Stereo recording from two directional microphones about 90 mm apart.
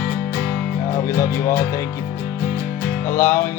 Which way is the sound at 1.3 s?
30° left (ahead or behind).